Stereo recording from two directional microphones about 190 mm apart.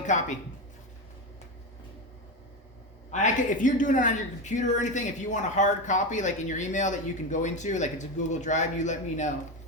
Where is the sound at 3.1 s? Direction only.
40° left (ahead or behind).